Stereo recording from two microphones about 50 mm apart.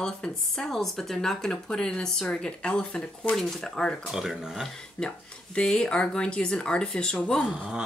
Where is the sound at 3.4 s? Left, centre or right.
Centre.